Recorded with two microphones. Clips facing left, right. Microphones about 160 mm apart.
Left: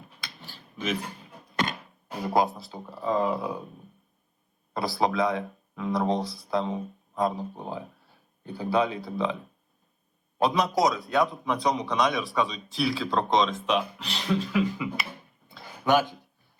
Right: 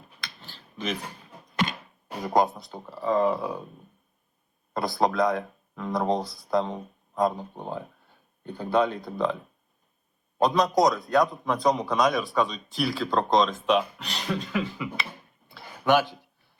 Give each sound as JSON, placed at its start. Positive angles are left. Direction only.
{"t": 0.5, "sound": "a sound", "side_deg": 0}
{"t": 2.2, "sound": "speech", "side_deg": 5}
{"t": 4.7, "sound": "speech", "side_deg": 0}
{"t": 10.4, "sound": "speech", "side_deg": 0}